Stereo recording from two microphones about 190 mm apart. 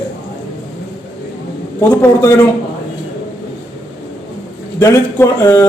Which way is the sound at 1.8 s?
15° left (ahead or behind).